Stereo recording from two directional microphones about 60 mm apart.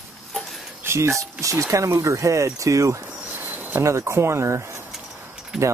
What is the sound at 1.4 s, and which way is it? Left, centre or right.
Speech, right.